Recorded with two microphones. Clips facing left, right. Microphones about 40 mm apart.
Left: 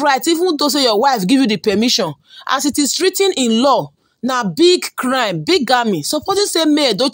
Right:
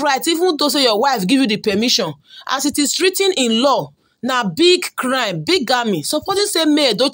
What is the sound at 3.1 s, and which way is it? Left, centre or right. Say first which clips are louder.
Speech: left 1 dB; centre.